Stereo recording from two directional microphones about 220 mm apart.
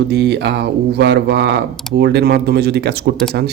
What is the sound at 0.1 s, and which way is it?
Speech, 50° right (ahead or behind).